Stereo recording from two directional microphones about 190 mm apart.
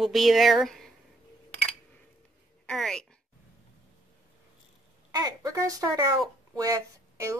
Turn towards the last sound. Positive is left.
turn(degrees=-15)  # may be behind; listen again after turning